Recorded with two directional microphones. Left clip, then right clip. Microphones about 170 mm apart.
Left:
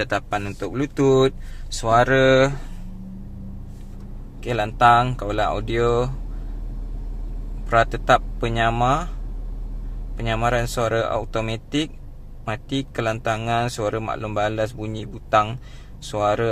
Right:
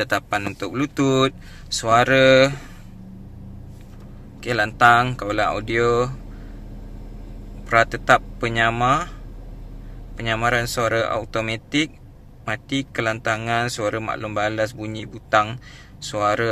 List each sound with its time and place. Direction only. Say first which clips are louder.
0.0 s a man's voice: right 2 dB; 5° left (ahead or behind)
4.4 s a man's voice: right 1 dB; 10° left (ahead or behind)
7.7 s a man's voice: right 1 dB; 15° left (ahead or behind)
10.1 s a man's voice: right 1 dB; 15° left (ahead or behind)